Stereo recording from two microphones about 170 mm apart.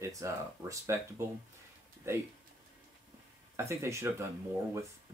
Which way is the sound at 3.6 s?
15° right (ahead or behind).